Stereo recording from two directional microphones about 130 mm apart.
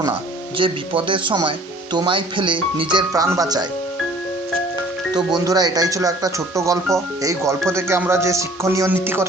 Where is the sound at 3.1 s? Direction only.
25° right (ahead or behind).